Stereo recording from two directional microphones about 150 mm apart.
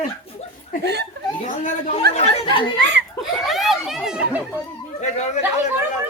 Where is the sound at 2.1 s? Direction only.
45° left (ahead or behind).